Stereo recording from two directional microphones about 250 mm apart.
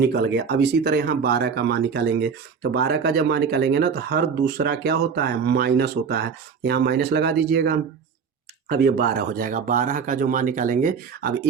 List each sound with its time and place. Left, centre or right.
0.0 s speech: right